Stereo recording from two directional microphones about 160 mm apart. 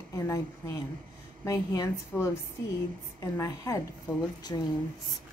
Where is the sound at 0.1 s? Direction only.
20° left (ahead or behind).